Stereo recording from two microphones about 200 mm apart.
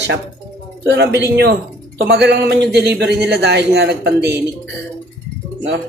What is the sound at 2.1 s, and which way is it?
A man's voice, 55° right (ahead or behind).